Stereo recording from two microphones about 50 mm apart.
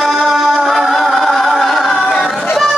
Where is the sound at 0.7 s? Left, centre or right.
Centre.